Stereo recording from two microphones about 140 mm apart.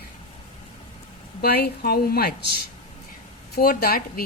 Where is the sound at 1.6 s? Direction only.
90° left.